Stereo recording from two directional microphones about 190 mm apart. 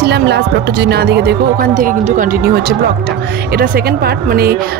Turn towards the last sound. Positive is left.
turn(degrees=-55)  # may be behind; listen again after turning